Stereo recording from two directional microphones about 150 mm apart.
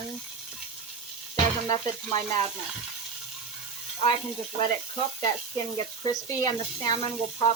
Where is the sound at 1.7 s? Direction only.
25° left (ahead or behind).